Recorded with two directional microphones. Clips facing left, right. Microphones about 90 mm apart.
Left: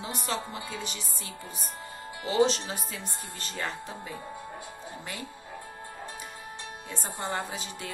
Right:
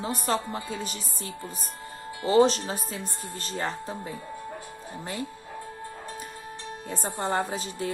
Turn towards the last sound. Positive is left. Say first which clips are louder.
# right 6 dB
turn(degrees=-40)  # may be behind; listen again after turning